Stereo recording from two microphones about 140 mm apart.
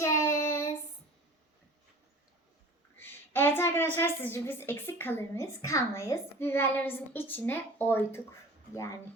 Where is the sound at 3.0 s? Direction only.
15° left (ahead or behind).